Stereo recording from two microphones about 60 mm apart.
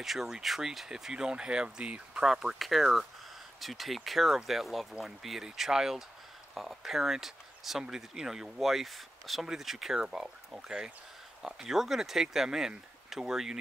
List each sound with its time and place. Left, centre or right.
0.0 s speech: centre